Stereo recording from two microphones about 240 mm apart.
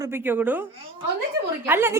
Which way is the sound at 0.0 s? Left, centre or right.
Centre.